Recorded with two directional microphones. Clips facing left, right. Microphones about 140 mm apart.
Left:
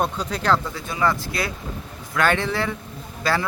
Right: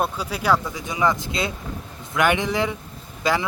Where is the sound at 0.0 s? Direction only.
10° right (ahead or behind).